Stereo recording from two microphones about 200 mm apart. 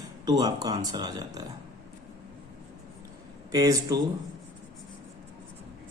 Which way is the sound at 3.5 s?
15° right (ahead or behind).